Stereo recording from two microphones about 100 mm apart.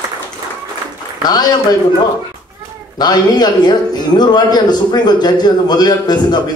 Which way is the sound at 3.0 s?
45° left (ahead or behind).